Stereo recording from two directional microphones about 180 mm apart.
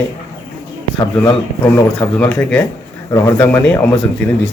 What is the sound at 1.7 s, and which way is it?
Speech, 15° left (ahead or behind).